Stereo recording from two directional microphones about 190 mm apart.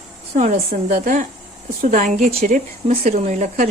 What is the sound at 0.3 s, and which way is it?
Speech, 35° right (ahead or behind).